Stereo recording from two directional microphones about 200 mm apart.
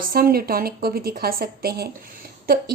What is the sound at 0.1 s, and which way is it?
A woman's voice, 50° right (ahead or behind).